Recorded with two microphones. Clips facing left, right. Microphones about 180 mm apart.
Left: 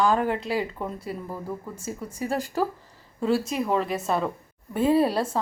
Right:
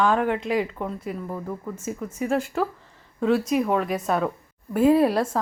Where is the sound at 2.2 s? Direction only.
35° left (ahead or behind).